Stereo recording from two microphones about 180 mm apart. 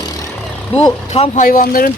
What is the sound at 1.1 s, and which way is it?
Speech, 40° left (ahead or behind).